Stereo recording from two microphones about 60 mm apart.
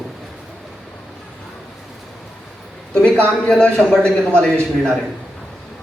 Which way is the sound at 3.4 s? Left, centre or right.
Centre.